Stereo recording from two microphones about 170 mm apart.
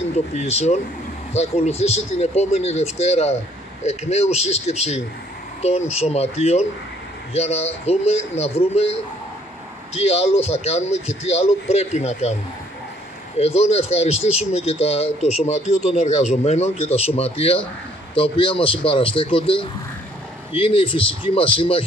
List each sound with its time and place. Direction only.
0.0 s speech: 40° left (ahead or behind)
9.9 s speech: 40° left (ahead or behind)
13.4 s speech: 40° left (ahead or behind)